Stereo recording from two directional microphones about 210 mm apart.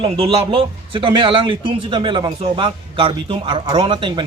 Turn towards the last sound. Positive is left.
turn(degrees=-25)  # may be behind; listen again after turning